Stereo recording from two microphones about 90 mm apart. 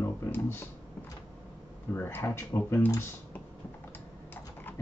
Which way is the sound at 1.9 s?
25° left (ahead or behind).